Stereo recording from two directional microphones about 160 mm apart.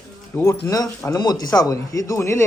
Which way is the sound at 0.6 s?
20° left (ahead or behind).